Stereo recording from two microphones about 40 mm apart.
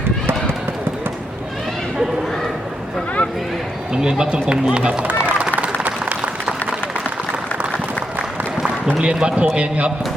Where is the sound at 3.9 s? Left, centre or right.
Centre.